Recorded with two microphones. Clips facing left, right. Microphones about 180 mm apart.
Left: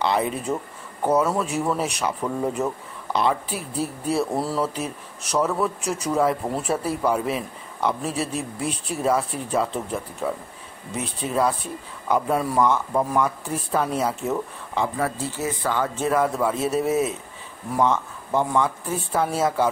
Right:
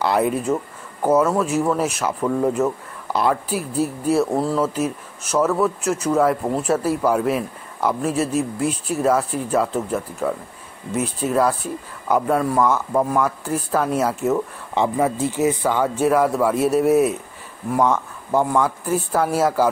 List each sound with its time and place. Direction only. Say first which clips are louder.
0.0 s speech: right 4 dB; 5° right (ahead or behind)
14.7 s a man's voice: right 5 dB; 20° right (ahead or behind)
16.6 s speech: right 7 dB; 60° right (ahead or behind)
17.7 s speech: right 2 dB; 10° right (ahead or behind)